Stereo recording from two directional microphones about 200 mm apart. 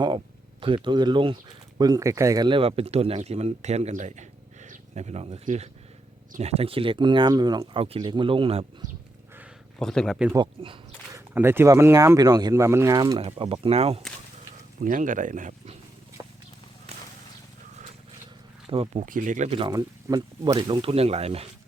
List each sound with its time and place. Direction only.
0.6 s speech: 25° right (ahead or behind)
9.7 s speech: 5° left (ahead or behind)
10.3 s speech: 25° right (ahead or behind)
11.3 s speech: 10° right (ahead or behind); by 14.0 s 30° right (ahead or behind)
14.8 s speech: 40° right (ahead or behind)
16.2 s clip-clop: 20° right (ahead or behind)
18.7 s speech: 30° right (ahead or behind)
19.0 s speech: 40° right (ahead or behind)